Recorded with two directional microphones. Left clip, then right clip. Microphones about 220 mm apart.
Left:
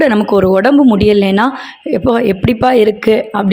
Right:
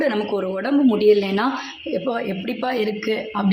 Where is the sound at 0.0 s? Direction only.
35° left (ahead or behind).